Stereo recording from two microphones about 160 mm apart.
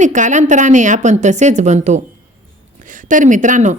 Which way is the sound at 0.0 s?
50° right (ahead or behind).